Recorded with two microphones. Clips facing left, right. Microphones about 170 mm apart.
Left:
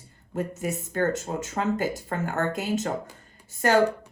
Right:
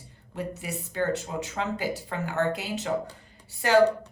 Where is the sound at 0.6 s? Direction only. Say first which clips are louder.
Left 2 dB; 45° left (ahead or behind).